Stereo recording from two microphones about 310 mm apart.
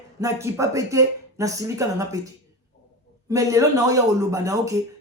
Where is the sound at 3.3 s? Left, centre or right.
Centre.